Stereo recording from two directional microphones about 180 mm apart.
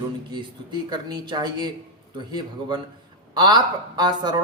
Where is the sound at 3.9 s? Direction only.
25° right (ahead or behind).